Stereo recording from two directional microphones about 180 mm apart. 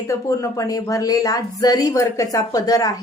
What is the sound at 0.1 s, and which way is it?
A woman's voice, 15° left (ahead or behind).